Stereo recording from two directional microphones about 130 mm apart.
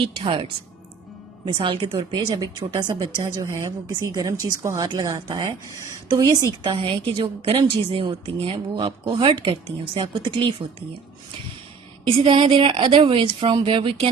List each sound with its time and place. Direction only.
0.0 s a woman's voice: 40° right (ahead or behind)
1.5 s a woman's voice: 40° right (ahead or behind)
12.0 s a woman's voice: 45° right (ahead or behind)